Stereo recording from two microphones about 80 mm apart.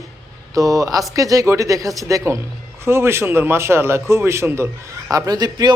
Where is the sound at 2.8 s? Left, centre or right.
Right.